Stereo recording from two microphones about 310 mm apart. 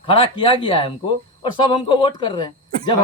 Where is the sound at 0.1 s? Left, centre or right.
Centre.